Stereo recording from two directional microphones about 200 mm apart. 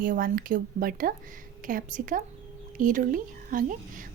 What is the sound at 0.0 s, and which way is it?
A woman's voice, 45° right (ahead or behind).